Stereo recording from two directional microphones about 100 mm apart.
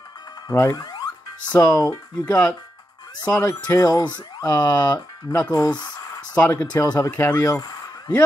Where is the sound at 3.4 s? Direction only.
35° left (ahead or behind).